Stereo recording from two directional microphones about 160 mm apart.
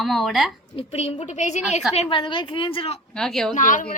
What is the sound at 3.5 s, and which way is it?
Speech, 55° left (ahead or behind).